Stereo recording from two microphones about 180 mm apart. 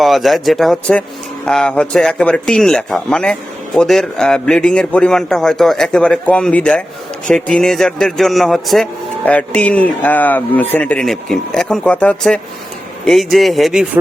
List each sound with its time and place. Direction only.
0.0 s a man's voice: centre (ahead or behind)